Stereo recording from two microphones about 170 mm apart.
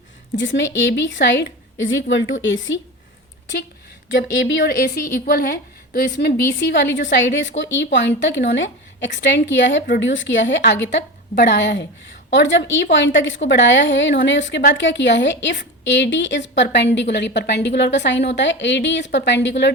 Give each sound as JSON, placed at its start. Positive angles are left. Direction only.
{"t": 0.3, "sound": "a woman's voice", "side_deg": 90}
{"t": 4.2, "sound": "a woman's voice", "side_deg": 90}
{"t": 9.8, "sound": "a woman's voice", "side_deg": 80}